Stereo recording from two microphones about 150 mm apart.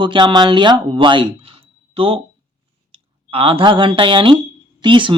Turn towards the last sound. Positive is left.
turn(degrees=-35)  # may be behind; listen again after turning